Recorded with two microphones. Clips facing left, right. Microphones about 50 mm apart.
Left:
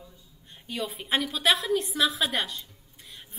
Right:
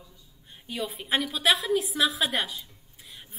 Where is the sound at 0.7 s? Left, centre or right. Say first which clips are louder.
Even; centre.